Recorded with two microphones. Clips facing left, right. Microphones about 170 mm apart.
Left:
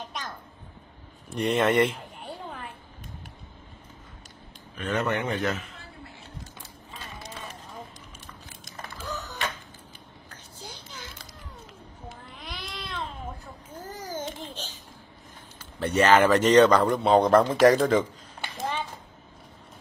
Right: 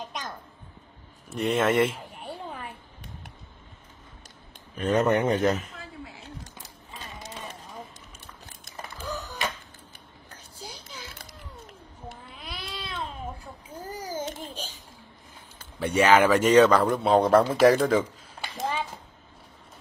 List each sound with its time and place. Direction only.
1.3 s speech: centre (ahead or behind)
4.7 s speech: 40° right (ahead or behind)
9.0 s a sound: 10° right (ahead or behind)
12.1 s babbling: 5° right (ahead or behind)
15.8 s a man's voice: 10° right (ahead or behind)